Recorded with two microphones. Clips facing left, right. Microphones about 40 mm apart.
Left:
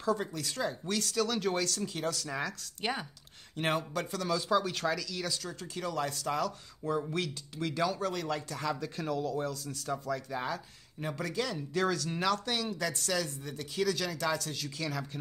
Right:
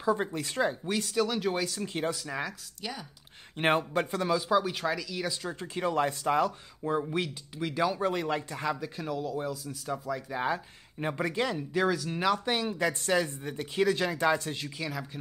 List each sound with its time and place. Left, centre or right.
0.0 s speech: right
1.9 s speech: right
2.1 s speech: centre
2.8 s speech: left
3.5 s speech: right
4.4 s speech: centre
8.8 s speech: centre
10.4 s speech: right
12.4 s speech: right
14.8 s speech: centre